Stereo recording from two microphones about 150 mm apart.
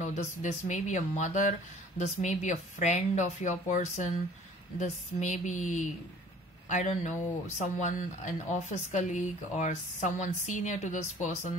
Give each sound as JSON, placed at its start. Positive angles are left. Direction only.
{"t": 0.0, "sound": "a woman's voice", "side_deg": 55}